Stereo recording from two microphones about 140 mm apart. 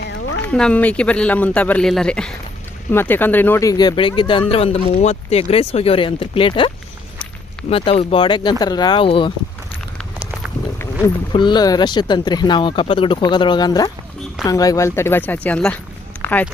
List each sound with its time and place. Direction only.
0.5 s speech: 5° left (ahead or behind); by 6.7 s 40° left (ahead or behind)
7.7 s speech: 45° left (ahead or behind)
11.3 s speech: 35° left (ahead or behind); by 16.5 s 10° left (ahead or behind)